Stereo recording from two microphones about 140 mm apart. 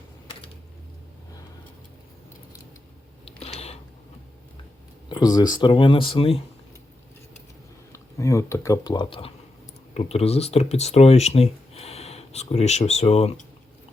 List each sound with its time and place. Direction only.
3.2 s a sound: 45° left (ahead or behind)
5.0 s speech: 30° left (ahead or behind)
7.9 s speech: 20° left (ahead or behind); by 13.4 s 45° left (ahead or behind)